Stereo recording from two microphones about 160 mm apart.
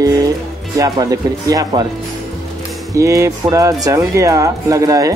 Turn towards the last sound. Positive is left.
turn(degrees=-20)  # may be behind; listen again after turning